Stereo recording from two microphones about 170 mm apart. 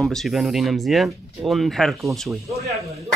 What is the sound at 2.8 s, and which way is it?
Speech, 35° right (ahead or behind).